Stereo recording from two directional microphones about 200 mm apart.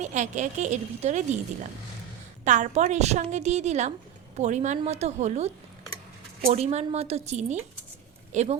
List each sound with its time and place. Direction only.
0.0 s a woman's voice: 35° right (ahead or behind)
2.4 s a woman's voice: 35° right (ahead or behind)